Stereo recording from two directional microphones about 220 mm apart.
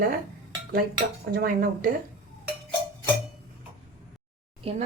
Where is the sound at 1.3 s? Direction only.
40° right (ahead or behind).